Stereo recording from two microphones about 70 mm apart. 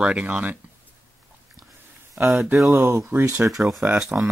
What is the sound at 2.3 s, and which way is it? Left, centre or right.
Speech, centre.